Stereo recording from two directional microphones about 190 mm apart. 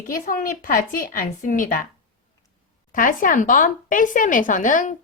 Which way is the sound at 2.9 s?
45° left (ahead or behind).